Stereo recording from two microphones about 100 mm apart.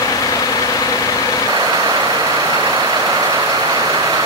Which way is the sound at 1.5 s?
40° right (ahead or behind).